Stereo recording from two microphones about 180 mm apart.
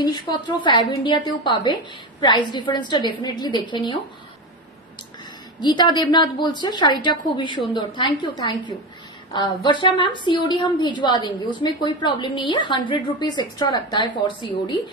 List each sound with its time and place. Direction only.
0.0 s a woman's voice: 25° left (ahead or behind)
5.6 s a woman's voice: 25° left (ahead or behind)